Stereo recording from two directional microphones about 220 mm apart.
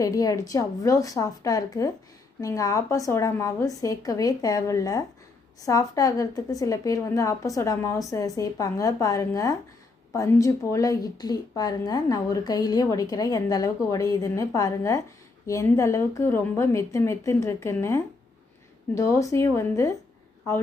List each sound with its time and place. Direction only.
0.0 s speech: 15° left (ahead or behind)